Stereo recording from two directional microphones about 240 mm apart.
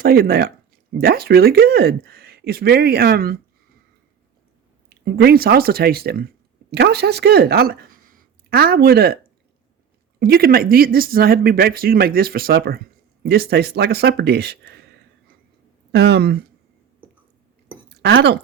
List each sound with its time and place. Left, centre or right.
0.0 s speech: right
5.0 s speech: right
10.2 s speech: right
15.9 s speech: right
17.8 s a sound: right